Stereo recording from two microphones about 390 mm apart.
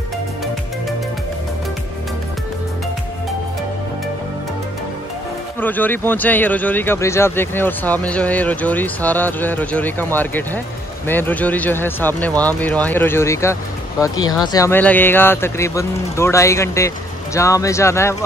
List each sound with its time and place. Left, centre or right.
5.6 s speech: centre